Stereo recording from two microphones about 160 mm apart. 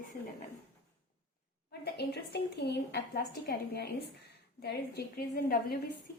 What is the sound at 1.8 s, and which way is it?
A woman's voice, 90° left.